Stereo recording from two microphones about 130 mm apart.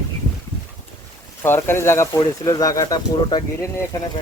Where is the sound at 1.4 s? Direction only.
20° left (ahead or behind).